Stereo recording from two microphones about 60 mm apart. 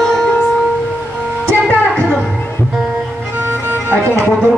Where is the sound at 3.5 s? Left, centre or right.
Right.